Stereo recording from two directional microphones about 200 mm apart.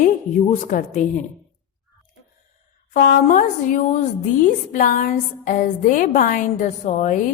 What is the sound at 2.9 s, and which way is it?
A woman's voice, 45° left (ahead or behind).